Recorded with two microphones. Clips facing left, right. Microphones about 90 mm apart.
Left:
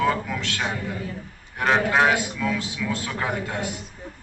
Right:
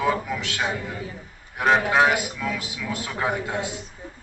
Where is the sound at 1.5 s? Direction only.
5° right (ahead or behind).